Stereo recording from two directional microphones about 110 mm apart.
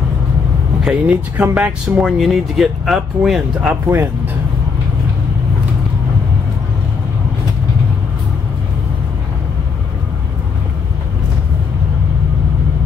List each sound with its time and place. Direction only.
0.8 s speech: 15° right (ahead or behind)
2.0 s speech: centre (ahead or behind)
3.8 s speech: 20° right (ahead or behind)